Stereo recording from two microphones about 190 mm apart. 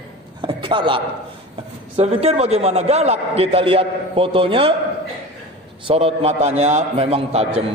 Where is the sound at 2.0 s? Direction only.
35° right (ahead or behind).